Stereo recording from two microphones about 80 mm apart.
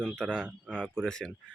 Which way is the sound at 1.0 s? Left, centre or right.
Centre.